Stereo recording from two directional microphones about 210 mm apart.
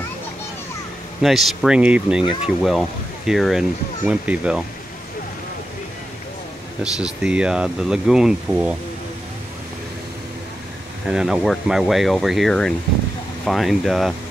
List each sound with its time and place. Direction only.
1.2 s speech: centre (ahead or behind)
6.8 s speech: 5° right (ahead or behind)
11.1 s speech: 5° right (ahead or behind)